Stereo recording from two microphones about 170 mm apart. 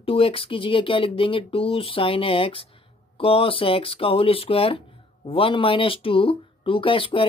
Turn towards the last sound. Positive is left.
turn(degrees=30)  # may be behind; listen again after turning